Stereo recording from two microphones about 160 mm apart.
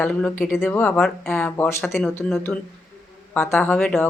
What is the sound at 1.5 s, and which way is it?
Speech, 15° left (ahead or behind).